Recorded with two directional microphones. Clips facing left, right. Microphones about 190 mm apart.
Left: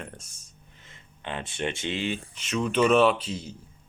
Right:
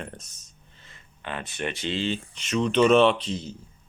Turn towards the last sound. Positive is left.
turn(degrees=10)  # may be behind; listen again after turning